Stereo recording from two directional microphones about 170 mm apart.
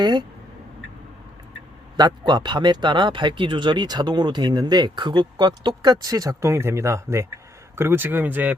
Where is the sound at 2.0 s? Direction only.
25° right (ahead or behind).